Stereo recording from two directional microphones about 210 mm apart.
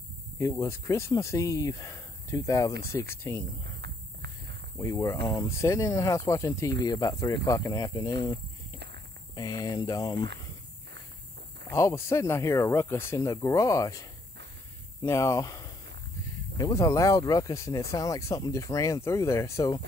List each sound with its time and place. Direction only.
0.4 s speech: 15° left (ahead or behind)
4.7 s speech: 15° left (ahead or behind)
11.7 s speech: 15° left (ahead or behind)
15.0 s speech: 15° left (ahead or behind)